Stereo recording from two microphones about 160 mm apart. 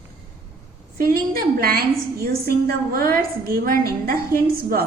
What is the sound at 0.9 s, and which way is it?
A woman's voice, 65° right (ahead or behind).